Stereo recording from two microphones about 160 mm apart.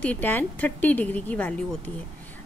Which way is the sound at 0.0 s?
10° left (ahead or behind).